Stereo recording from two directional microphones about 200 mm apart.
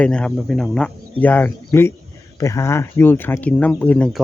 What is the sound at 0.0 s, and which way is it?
Speech, 5° left (ahead or behind).